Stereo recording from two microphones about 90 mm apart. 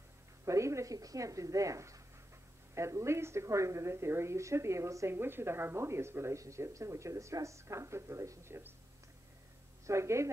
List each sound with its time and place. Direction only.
0.5 s a woman's voice: 35° right (ahead or behind)
9.8 s a woman's voice: 30° right (ahead or behind)